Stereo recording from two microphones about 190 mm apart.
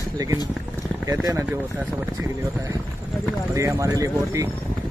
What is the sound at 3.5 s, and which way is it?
Speech, 15° right (ahead or behind).